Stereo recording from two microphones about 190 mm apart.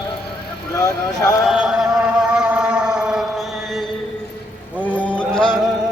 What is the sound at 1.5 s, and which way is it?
Chant, centre (ahead or behind).